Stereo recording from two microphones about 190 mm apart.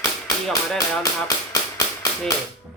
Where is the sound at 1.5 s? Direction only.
20° left (ahead or behind).